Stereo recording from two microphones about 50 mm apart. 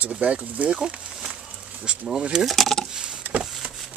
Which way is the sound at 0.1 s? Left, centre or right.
Right.